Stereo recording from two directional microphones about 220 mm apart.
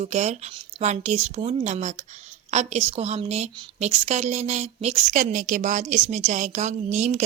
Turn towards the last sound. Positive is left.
turn(degrees=-35)  # may be behind; listen again after turning